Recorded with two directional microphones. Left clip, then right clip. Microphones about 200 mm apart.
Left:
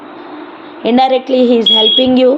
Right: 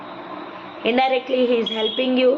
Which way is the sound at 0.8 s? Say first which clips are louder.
Left 8 dB; 45° left (ahead or behind).